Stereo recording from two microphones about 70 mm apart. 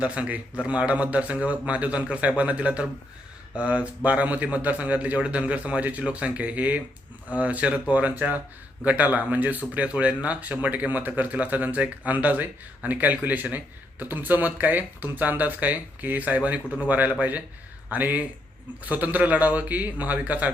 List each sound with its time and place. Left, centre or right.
0.0 s speech: centre